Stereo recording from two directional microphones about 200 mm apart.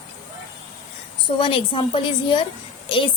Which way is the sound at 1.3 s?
25° left (ahead or behind).